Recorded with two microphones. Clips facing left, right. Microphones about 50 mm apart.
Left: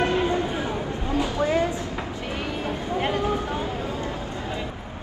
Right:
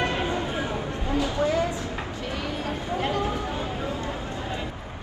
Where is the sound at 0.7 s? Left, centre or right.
Left.